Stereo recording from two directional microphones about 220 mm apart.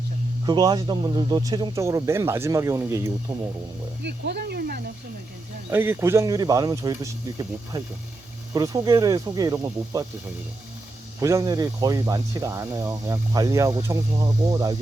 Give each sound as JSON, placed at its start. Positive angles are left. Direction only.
{"t": 0.4, "sound": "speech", "side_deg": -20}
{"t": 4.0, "sound": "speech", "side_deg": -50}
{"t": 5.7, "sound": "speech", "side_deg": -10}
{"t": 11.2, "sound": "speech", "side_deg": -15}